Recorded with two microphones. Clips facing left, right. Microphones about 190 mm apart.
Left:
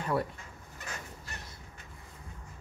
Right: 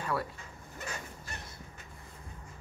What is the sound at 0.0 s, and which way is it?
Speech, 20° left (ahead or behind).